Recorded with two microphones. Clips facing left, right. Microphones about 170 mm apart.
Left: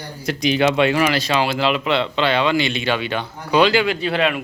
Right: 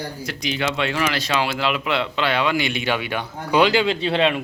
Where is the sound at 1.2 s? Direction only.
Centre (ahead or behind); by 4.4 s 30° right (ahead or behind).